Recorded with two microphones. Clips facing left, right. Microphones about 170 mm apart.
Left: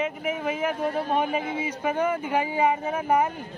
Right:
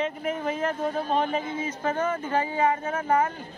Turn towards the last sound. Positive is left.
turn(degrees=15)  # may be behind; listen again after turning